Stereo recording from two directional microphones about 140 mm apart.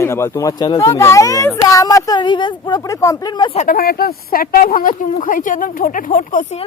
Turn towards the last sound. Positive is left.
turn(degrees=65)  # may be behind; listen again after turning